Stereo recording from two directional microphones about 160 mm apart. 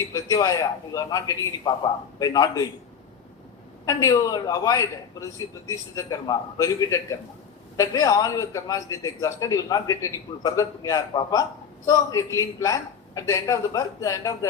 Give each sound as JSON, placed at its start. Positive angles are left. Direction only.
{"t": 0.0, "sound": "a man's voice", "side_deg": 20}
{"t": 3.8, "sound": "a man's voice", "side_deg": 20}